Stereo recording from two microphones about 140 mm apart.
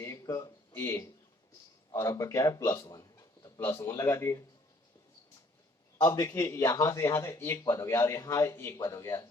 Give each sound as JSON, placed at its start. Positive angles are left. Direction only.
{"t": 0.0, "sound": "a sound", "side_deg": 25}
{"t": 0.7, "sound": "speech", "side_deg": 20}
{"t": 6.0, "sound": "a man's voice", "side_deg": 20}